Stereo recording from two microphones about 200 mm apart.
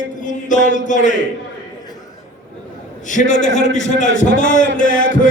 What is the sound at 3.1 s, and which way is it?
A man's voice, 40° left (ahead or behind).